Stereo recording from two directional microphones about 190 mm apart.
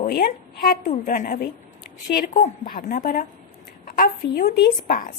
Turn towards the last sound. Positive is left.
turn(degrees=50)  # may be behind; listen again after turning